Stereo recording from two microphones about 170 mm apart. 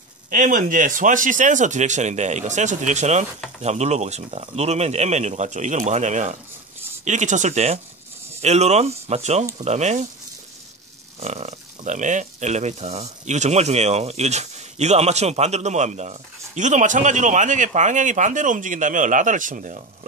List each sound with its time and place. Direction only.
0.3 s speech: 50° right (ahead or behind)
11.1 s speech: 40° right (ahead or behind)